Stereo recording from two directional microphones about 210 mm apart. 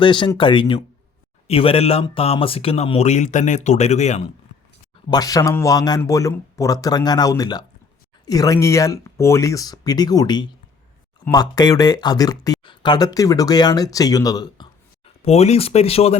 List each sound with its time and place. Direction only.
0.0 s speech: 20° left (ahead or behind)
5.1 s speech: 15° left (ahead or behind)
15.2 s speech: 30° left (ahead or behind)